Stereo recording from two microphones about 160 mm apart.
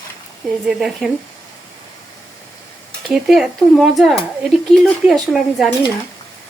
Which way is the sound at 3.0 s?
Centre (ahead or behind).